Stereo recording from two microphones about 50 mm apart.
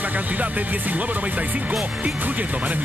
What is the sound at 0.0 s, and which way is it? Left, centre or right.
Speech, right.